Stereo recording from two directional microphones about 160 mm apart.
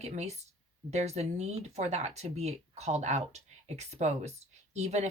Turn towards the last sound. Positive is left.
turn(degrees=-45)  # may be behind; listen again after turning